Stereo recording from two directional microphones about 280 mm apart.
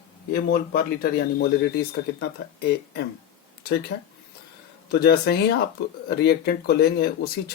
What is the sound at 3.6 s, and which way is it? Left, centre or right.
Speech, left.